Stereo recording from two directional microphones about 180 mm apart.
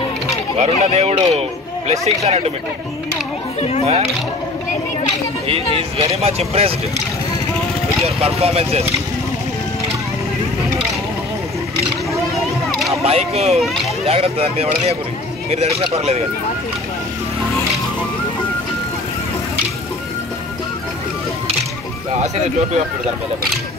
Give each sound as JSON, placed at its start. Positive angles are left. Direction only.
{"t": 0.6, "sound": "speech", "side_deg": -35}
{"t": 3.8, "sound": "speech", "side_deg": -35}
{"t": 5.8, "sound": "speech", "side_deg": -35}
{"t": 8.0, "sound": "speech", "side_deg": -35}
{"t": 13.0, "sound": "speech", "side_deg": -35}